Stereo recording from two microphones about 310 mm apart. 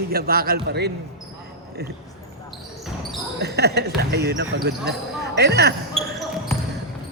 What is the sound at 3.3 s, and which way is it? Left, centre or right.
Speech, right.